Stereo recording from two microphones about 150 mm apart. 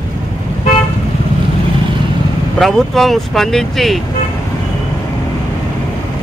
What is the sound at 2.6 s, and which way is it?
Speech, centre (ahead or behind).